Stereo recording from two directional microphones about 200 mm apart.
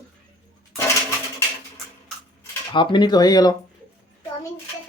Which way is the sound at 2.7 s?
25° left (ahead or behind).